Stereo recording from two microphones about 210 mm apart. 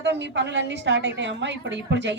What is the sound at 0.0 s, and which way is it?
A woman's voice, 55° right (ahead or behind).